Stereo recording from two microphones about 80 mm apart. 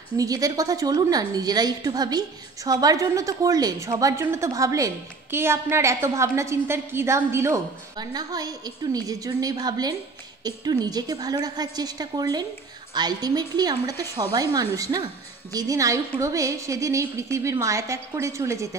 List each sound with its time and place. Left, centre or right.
0.2 s a woman's voice: right
5.3 s a woman's voice: right
8.0 s a woman's voice: right
15.5 s a woman's voice: right